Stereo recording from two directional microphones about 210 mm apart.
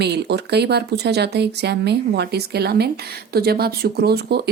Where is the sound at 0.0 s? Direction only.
50° right (ahead or behind).